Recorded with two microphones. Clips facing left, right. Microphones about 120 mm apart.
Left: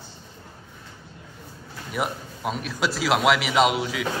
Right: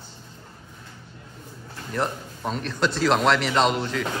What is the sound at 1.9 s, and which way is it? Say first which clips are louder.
A man's voice: right 1 dB; 10° left (ahead or behind).